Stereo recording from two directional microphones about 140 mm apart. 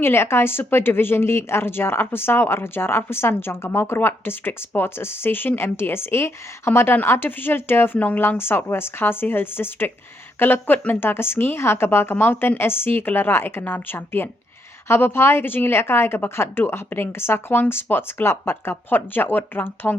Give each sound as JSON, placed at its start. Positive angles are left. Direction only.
{"t": 0.0, "sound": "speech", "side_deg": 15}